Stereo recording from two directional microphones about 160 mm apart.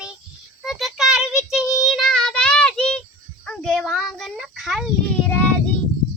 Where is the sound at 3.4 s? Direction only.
5° left (ahead or behind).